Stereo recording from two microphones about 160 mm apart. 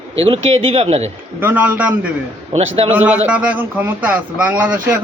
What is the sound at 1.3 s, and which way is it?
Speech, 10° right (ahead or behind).